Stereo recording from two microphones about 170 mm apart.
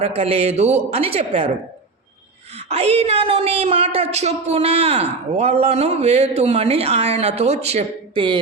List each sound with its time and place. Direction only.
0.0 s a woman's voice: 35° right (ahead or behind)
2.6 s a woman's voice: 35° right (ahead or behind)